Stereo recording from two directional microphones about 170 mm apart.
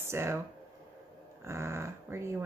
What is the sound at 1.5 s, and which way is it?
Speech, 15° right (ahead or behind).